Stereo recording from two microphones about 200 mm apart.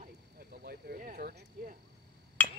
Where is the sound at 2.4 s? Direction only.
10° left (ahead or behind).